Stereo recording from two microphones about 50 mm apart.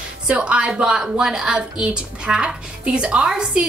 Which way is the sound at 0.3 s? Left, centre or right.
Right.